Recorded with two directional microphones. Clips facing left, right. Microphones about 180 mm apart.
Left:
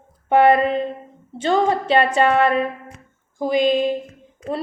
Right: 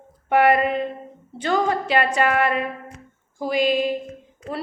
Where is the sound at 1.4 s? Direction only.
25° left (ahead or behind).